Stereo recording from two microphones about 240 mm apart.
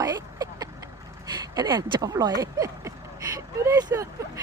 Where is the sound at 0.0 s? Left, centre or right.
Centre.